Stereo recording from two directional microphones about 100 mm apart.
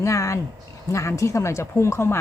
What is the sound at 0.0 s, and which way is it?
A man's voice, 30° left (ahead or behind).